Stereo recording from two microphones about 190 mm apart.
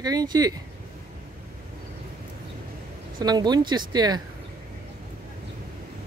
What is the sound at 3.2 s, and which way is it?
Speech, 20° right (ahead or behind).